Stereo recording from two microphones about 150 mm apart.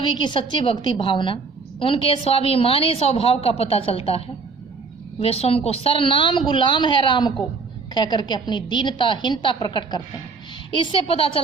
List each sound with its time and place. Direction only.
0.0 s a woman's voice: 30° left (ahead or behind)
5.2 s a woman's voice: 40° left (ahead or behind)
10.9 s a woman's voice: 40° left (ahead or behind)